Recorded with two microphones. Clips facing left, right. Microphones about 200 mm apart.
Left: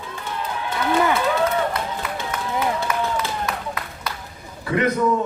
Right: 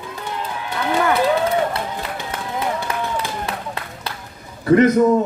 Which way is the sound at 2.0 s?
30° right (ahead or behind).